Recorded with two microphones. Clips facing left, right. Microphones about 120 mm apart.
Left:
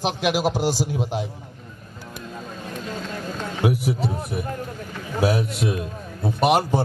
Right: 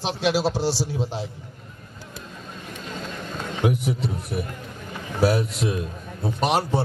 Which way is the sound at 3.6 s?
5° left (ahead or behind).